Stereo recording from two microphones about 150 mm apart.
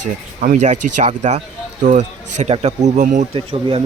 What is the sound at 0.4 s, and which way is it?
Speech, 55° right (ahead or behind).